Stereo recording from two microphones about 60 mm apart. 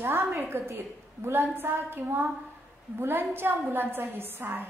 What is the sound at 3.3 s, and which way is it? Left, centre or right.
A woman's voice, right.